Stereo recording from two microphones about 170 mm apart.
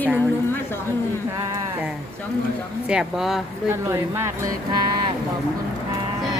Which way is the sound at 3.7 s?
15° right (ahead or behind).